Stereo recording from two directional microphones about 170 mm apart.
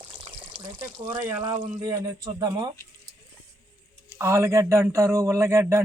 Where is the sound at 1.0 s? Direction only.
15° right (ahead or behind).